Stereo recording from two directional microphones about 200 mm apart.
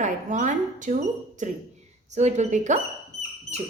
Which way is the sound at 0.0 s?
35° right (ahead or behind).